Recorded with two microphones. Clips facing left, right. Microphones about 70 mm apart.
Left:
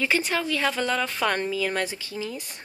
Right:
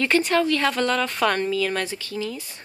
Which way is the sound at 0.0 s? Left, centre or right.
Centre.